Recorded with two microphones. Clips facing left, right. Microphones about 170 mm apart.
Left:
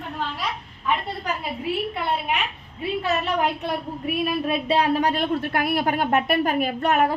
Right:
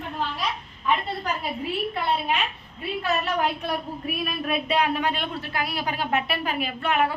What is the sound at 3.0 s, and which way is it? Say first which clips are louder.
Speech: left 1 dB; 20° left (ahead or behind).